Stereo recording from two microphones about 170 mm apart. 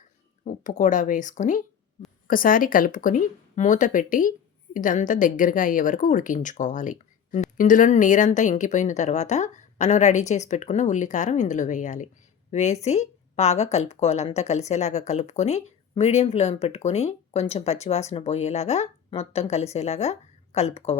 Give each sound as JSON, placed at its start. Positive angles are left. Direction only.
{"t": 0.4, "sound": "speech", "side_deg": 45}